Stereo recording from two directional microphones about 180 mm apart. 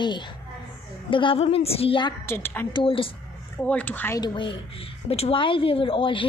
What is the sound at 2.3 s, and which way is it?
Speech, 10° left (ahead or behind).